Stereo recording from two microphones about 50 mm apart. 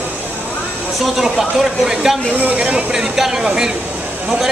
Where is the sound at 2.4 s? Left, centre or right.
Centre.